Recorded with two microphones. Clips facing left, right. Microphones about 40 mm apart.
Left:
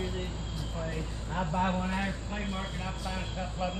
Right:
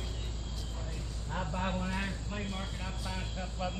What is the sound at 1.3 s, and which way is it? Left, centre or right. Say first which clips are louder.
Speech: left 5 dB; centre.